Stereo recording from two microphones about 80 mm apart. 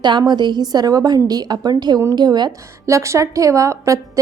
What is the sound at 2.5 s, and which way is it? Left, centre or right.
A woman's voice, right.